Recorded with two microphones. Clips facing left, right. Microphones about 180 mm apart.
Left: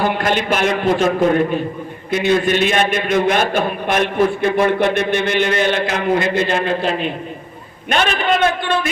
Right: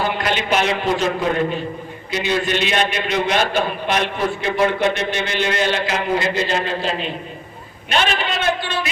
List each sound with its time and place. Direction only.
0.0 s a man's voice: 50° left (ahead or behind)